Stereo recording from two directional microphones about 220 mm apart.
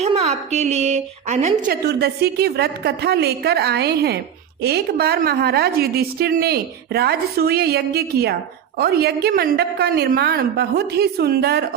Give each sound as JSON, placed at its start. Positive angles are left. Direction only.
{"t": 0.0, "sound": "a woman's voice", "side_deg": -30}
{"t": 1.7, "sound": "a woman's voice", "side_deg": -45}